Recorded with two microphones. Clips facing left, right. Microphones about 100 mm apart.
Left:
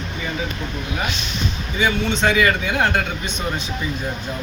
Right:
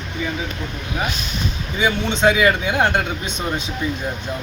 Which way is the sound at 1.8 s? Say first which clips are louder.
Right 2 dB; 15° right (ahead or behind).